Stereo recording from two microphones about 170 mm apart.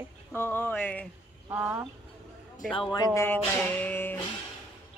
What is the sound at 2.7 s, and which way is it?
Speech, 30° left (ahead or behind).